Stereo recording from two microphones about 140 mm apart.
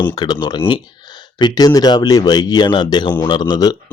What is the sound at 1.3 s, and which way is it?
A man's voice, 30° left (ahead or behind).